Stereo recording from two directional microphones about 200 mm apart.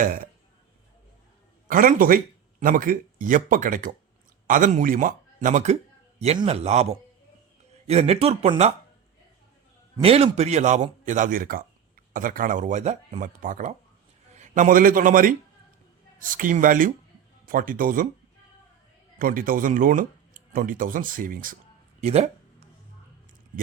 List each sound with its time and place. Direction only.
0.0 s speech: 45° right (ahead or behind)
1.6 s a man's voice: 45° right (ahead or behind)
7.9 s a man's voice: 30° right (ahead or behind)
10.0 s a man's voice: 30° right (ahead or behind)
19.2 s speech: 45° right (ahead or behind)
22.0 s a man's voice: 30° right (ahead or behind)